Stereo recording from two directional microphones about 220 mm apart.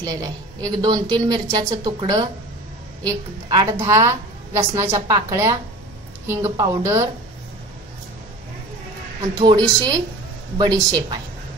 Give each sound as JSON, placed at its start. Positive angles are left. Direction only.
{"t": 0.0, "sound": "a woman's voice", "side_deg": -15}
{"t": 9.2, "sound": "a woman's voice", "side_deg": -20}